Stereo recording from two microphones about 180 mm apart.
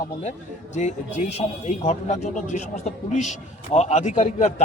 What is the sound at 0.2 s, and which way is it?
A man's voice, 40° left (ahead or behind).